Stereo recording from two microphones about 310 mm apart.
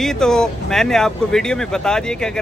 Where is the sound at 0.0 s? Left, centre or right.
Centre.